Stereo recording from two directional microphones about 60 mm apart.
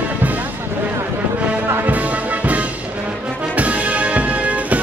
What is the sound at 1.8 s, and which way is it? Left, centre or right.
Music, right.